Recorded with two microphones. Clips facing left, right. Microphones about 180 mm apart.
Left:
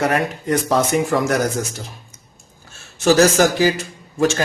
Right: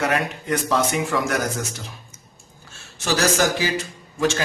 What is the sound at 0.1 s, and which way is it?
Speech, 40° left (ahead or behind).